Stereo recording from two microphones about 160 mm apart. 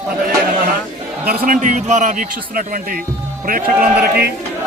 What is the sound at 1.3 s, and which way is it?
A man's voice, 65° right (ahead or behind).